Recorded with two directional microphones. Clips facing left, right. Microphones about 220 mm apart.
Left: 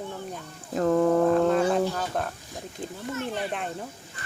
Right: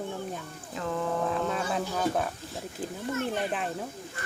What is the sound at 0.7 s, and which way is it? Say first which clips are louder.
Speech: left 10 dB; 45° left (ahead or behind).